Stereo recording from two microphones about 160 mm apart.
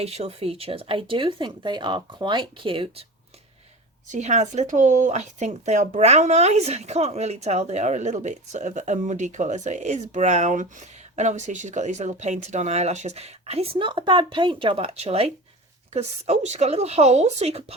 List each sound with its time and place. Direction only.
0.0 s speech: 40° right (ahead or behind)
4.1 s speech: 50° right (ahead or behind)